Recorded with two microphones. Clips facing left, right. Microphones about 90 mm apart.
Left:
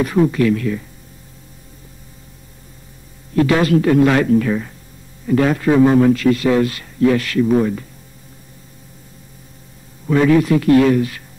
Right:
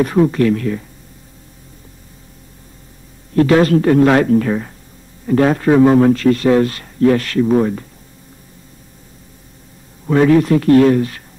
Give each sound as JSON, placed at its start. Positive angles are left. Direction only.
{"t": 0.0, "sound": "a man's voice", "side_deg": -45}
{"t": 3.3, "sound": "a man's voice", "side_deg": -45}
{"t": 10.0, "sound": "a man's voice", "side_deg": -45}